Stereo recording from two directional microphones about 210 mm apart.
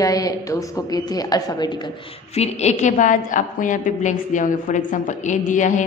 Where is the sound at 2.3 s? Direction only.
30° left (ahead or behind).